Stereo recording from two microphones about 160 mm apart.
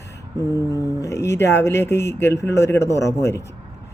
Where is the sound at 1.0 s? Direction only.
20° left (ahead or behind).